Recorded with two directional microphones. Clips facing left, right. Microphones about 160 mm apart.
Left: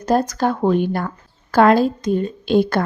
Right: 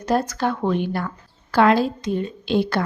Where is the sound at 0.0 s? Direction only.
40° left (ahead or behind).